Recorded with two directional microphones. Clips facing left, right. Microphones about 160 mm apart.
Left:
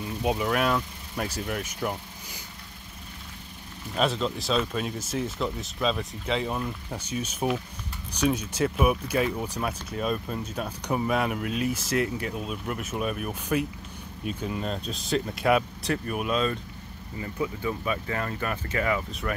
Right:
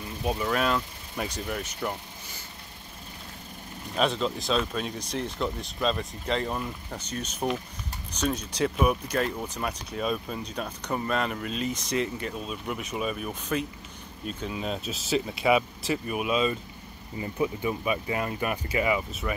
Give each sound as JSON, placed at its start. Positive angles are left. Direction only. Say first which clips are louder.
{"t": 0.2, "sound": "speech", "louder": "left 2 dB", "side_deg": 15}
{"t": 0.5, "sound": "speech", "louder": "left 1 dB", "side_deg": 5}
{"t": 3.9, "sound": "speech", "louder": "even", "side_deg": 0}
{"t": 17.2, "sound": "speech", "louder": "right 2 dB", "side_deg": -20}